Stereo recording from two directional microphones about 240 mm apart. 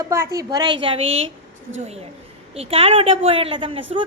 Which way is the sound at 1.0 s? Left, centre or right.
Right.